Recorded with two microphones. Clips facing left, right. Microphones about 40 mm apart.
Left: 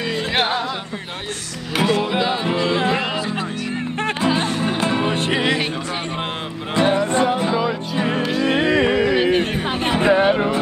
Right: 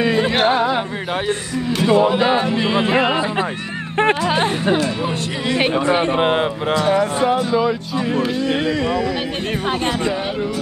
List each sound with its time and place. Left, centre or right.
2.6 s music: right
4.3 s music: right
4.7 s music: left
5.6 s speech: right
6.7 s music: left
8.4 s music: centre
8.6 s music: left
9.1 s music: centre
9.8 s speech: left